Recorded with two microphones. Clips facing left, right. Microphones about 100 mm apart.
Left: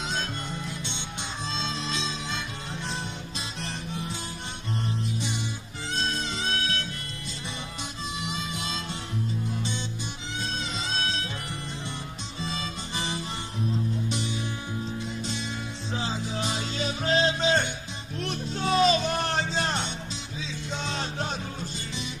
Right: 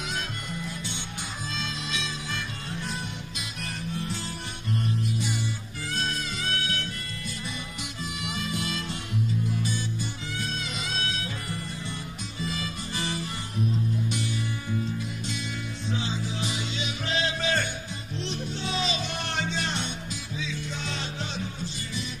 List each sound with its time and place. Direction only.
0.1 s music: 25° left (ahead or behind)
5.9 s music: 25° left (ahead or behind)
8.2 s music: 25° left (ahead or behind)
10.4 s music: 30° left (ahead or behind)
12.4 s harmonica: 25° left (ahead or behind)
14.0 s music: 25° left (ahead or behind)
15.9 s music: 35° left (ahead or behind)
18.2 s music: 50° left (ahead or behind)